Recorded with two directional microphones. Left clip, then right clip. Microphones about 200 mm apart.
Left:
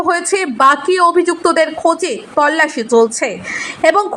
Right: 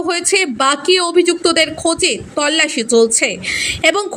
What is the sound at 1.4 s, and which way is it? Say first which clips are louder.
Speech: left 2 dB; 40° right (ahead or behind).